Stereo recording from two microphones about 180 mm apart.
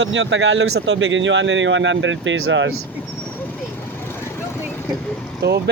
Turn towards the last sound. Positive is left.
turn(degrees=-65)  # may be behind; listen again after turning